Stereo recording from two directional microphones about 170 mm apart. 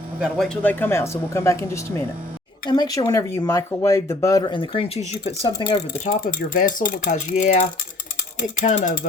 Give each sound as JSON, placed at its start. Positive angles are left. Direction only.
{"t": 0.2, "sound": "speech", "side_deg": 0}
{"t": 5.5, "sound": "speech", "side_deg": 25}
{"t": 6.1, "sound": "speech", "side_deg": 50}